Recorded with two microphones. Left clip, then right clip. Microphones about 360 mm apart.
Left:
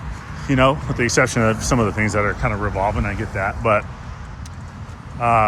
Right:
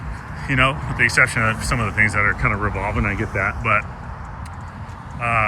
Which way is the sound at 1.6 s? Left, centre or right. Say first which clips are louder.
Right 1 dB; centre.